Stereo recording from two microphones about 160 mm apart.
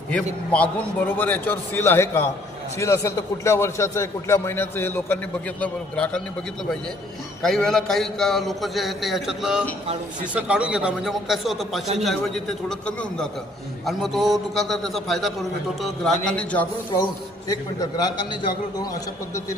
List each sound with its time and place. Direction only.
0.1 s a man's voice: 10° left (ahead or behind)
7.4 s a man's voice: 5° left (ahead or behind)
17.5 s a man's voice: 25° left (ahead or behind)